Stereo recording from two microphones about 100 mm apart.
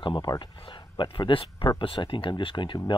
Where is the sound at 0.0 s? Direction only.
55° left (ahead or behind).